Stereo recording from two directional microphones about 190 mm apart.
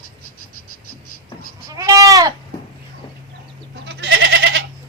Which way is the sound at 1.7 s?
20° right (ahead or behind).